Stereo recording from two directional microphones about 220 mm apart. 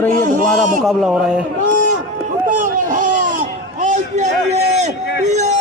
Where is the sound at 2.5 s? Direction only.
35° right (ahead or behind).